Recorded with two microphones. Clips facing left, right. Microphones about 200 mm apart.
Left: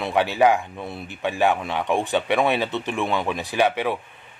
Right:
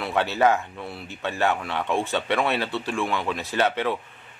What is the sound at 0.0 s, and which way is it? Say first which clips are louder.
Speech: left 3 dB; 15° left (ahead or behind).